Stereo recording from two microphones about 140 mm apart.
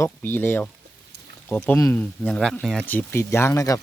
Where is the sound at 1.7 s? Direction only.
20° left (ahead or behind).